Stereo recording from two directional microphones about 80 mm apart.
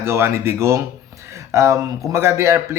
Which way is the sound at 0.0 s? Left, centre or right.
Right.